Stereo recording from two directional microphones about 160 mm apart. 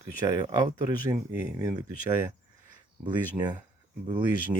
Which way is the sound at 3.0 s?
25° right (ahead or behind).